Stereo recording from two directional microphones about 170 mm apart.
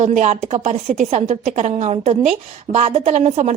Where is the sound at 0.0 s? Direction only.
45° right (ahead or behind).